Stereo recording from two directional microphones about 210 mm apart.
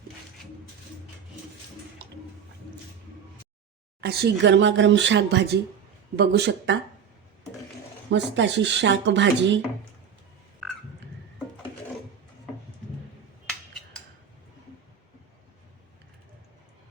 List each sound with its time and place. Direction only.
4.0 s speech: 55° right (ahead or behind)
8.1 s speech: 55° right (ahead or behind)
10.6 s frog: centre (ahead or behind)